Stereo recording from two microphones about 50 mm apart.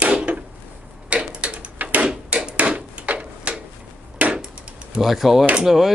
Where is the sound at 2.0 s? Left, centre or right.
Right.